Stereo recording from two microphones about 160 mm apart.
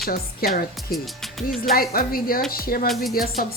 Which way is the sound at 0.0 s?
65° left (ahead or behind).